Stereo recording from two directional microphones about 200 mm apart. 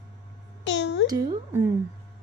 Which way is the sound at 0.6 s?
65° left (ahead or behind).